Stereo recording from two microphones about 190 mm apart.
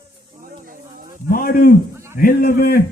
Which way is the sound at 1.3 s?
50° left (ahead or behind).